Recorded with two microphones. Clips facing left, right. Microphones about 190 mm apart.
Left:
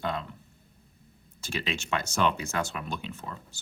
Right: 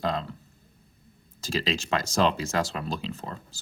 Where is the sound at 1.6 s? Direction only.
35° right (ahead or behind).